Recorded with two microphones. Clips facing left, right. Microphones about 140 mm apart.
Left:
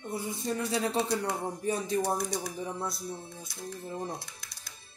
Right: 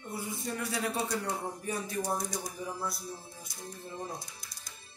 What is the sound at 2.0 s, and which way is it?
Speech, 65° left (ahead or behind).